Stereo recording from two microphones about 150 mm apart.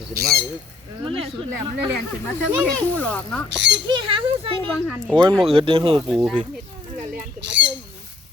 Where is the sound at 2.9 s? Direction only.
10° left (ahead or behind).